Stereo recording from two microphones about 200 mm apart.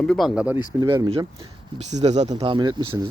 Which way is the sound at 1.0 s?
30° right (ahead or behind).